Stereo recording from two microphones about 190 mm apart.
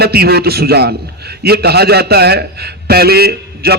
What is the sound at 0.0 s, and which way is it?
A man's voice, 55° right (ahead or behind).